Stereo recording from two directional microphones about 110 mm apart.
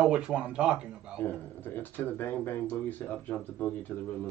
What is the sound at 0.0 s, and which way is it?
Speech, 10° right (ahead or behind).